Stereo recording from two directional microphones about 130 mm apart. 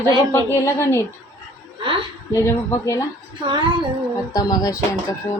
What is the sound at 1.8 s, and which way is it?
Speech, 40° right (ahead or behind).